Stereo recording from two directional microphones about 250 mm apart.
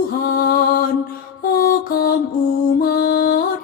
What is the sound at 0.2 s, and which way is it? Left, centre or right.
Music, left.